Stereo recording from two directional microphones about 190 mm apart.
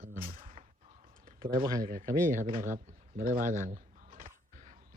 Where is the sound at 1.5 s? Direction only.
20° right (ahead or behind).